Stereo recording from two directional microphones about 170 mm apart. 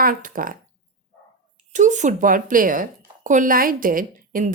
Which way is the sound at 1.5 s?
45° right (ahead or behind).